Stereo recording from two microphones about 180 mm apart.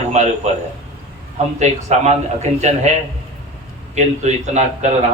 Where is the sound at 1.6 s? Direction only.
40° right (ahead or behind).